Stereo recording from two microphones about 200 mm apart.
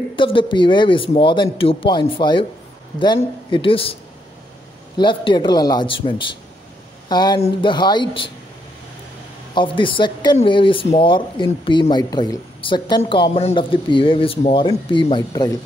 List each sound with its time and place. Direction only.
0.1 s speech: 25° left (ahead or behind)
9.5 s speech: 25° left (ahead or behind)